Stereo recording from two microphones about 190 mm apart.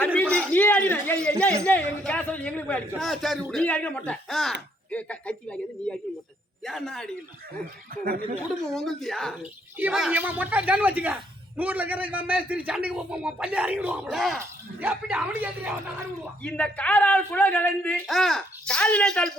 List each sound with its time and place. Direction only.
0.2 s a sound: 5° left (ahead or behind)
1.6 s a man's voice: 5° left (ahead or behind)
8.0 s speech: 50° right (ahead or behind)
8.7 s speech: centre (ahead or behind)
16.4 s a man's voice: 5° left (ahead or behind)